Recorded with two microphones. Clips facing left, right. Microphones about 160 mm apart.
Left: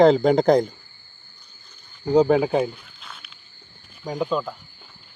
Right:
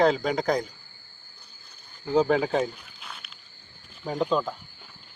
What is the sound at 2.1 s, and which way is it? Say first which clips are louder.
Speech: left 5 dB; 20° left (ahead or behind).